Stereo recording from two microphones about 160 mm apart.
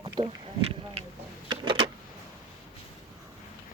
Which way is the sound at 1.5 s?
35° right (ahead or behind).